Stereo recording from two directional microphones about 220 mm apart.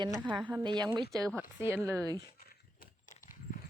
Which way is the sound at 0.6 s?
20° right (ahead or behind).